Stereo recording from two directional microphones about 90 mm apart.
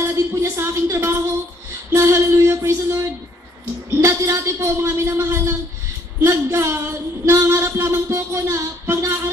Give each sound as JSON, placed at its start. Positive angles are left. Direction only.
{"t": 0.0, "sound": "speech", "side_deg": -30}
{"t": 1.9, "sound": "music", "side_deg": -30}
{"t": 4.0, "sound": "a man's voice", "side_deg": -35}